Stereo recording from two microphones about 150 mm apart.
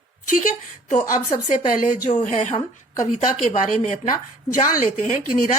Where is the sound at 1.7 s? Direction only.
65° left (ahead or behind).